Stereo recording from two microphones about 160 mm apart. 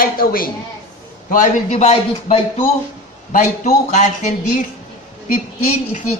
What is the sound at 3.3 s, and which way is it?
Speech, 50° left (ahead or behind).